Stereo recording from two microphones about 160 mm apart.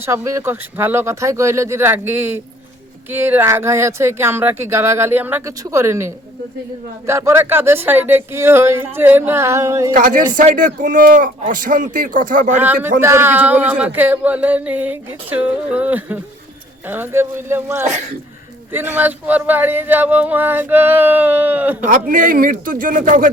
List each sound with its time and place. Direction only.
0.0 s speech: 20° right (ahead or behind)
9.9 s a man's voice: 55° right (ahead or behind)
12.5 s speech: 10° right (ahead or behind)
21.8 s a man's voice: 55° right (ahead or behind)